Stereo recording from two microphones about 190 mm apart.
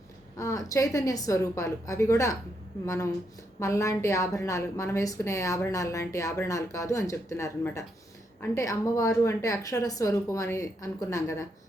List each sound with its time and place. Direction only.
0.3 s a woman's voice: 15° left (ahead or behind)